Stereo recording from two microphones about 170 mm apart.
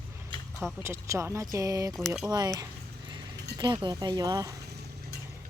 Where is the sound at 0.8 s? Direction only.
15° right (ahead or behind).